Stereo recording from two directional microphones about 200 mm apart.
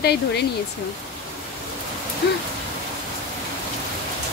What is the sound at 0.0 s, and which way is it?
Speech, 55° left (ahead or behind).